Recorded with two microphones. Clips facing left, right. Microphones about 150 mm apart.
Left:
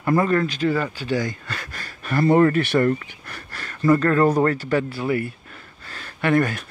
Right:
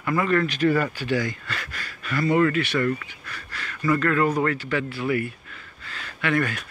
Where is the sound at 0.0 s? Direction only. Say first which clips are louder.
Left 3 dB; 35° left (ahead or behind).